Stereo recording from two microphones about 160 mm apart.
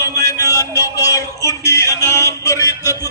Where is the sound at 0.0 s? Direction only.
20° left (ahead or behind).